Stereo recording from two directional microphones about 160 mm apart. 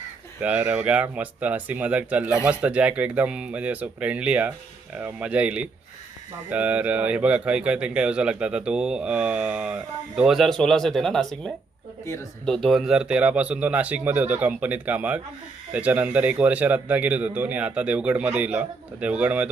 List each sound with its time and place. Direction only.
0.4 s speech: 10° right (ahead or behind)